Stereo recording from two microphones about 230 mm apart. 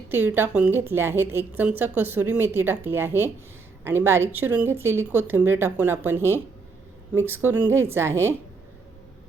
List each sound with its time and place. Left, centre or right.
0.1 s a woman's voice: centre